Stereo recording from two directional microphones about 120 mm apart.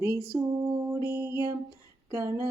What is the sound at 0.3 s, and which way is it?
Mantra, 25° right (ahead or behind).